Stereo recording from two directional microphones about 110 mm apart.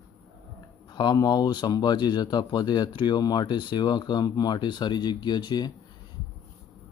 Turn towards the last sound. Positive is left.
turn(degrees=40)  # may be behind; listen again after turning